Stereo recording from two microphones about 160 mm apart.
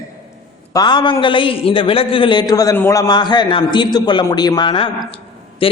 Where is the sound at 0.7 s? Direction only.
25° left (ahead or behind).